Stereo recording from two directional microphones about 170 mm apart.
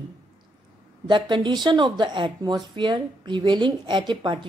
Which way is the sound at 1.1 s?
30° right (ahead or behind).